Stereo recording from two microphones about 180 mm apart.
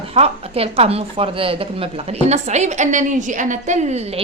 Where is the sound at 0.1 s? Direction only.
35° right (ahead or behind).